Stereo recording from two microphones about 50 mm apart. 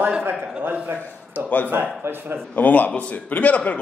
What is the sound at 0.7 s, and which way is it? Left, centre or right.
Speech, right.